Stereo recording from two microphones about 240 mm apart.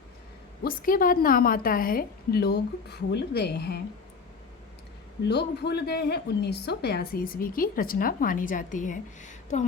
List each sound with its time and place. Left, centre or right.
0.6 s a woman's voice: left
5.3 s a woman's voice: left